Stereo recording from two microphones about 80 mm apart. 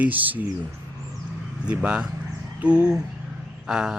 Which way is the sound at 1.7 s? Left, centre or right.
Centre.